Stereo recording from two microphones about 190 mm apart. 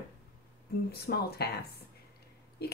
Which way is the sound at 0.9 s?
55° left (ahead or behind).